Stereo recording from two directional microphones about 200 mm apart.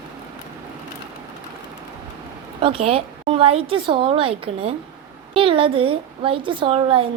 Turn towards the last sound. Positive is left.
turn(degrees=-25)  # may be behind; listen again after turning